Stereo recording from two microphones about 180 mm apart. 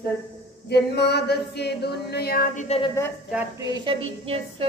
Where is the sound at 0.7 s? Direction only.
65° left (ahead or behind); by 2.7 s 45° left (ahead or behind).